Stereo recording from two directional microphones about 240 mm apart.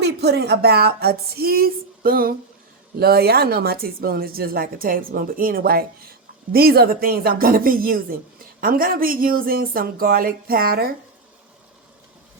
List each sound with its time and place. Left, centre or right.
0.0 s speech: right